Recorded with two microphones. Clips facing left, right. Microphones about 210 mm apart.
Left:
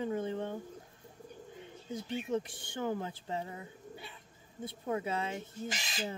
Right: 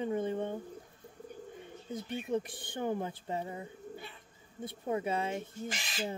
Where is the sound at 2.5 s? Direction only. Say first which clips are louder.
Right 4 dB; 55° right (ahead or behind).